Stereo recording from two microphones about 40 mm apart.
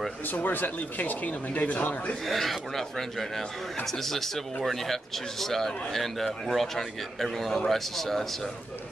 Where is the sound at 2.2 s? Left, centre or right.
Centre.